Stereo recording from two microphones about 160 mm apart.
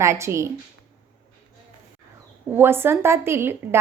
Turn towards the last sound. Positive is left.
turn(degrees=-15)  # may be behind; listen again after turning